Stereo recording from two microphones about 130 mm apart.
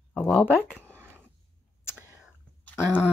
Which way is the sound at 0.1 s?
10° left (ahead or behind).